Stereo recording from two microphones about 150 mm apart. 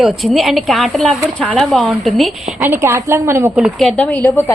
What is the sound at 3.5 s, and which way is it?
A woman's voice, centre (ahead or behind).